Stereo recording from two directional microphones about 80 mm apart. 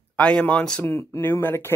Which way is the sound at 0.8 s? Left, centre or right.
Left.